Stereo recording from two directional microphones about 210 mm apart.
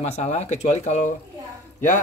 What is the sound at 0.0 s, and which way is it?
Speech, 30° left (ahead or behind).